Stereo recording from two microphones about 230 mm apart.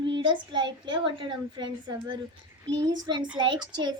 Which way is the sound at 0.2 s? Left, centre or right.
Centre.